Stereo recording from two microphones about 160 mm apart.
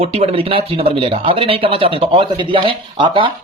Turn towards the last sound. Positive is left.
turn(degrees=-30)  # may be behind; listen again after turning